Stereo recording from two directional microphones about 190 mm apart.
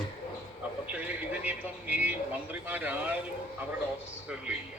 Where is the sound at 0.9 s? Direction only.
5° right (ahead or behind).